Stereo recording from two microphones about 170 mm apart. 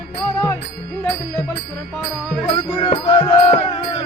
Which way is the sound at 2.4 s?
30° left (ahead or behind).